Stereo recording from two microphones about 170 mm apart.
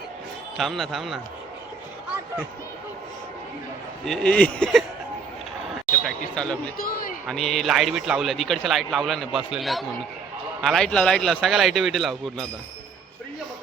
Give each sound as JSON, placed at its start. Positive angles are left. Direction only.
{"t": 0.5, "sound": "a man's voice", "side_deg": 0}
{"t": 4.0, "sound": "a man's voice", "side_deg": 5}
{"t": 6.1, "sound": "a man's voice", "side_deg": 5}
{"t": 6.7, "sound": "a man's voice", "side_deg": 60}
{"t": 7.3, "sound": "a man's voice", "side_deg": 0}